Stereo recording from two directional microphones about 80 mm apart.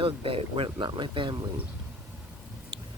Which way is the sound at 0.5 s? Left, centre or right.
Right.